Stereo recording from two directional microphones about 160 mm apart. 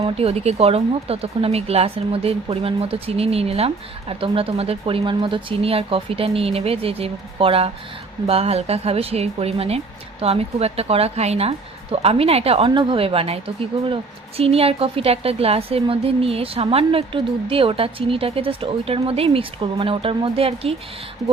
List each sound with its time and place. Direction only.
0.0 s speech: 40° right (ahead or behind)